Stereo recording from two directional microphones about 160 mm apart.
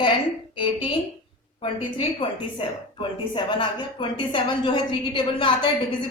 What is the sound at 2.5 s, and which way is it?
A woman's voice, 30° left (ahead or behind).